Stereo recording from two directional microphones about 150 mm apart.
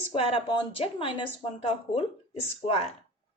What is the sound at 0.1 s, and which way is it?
A woman's voice, 40° left (ahead or behind).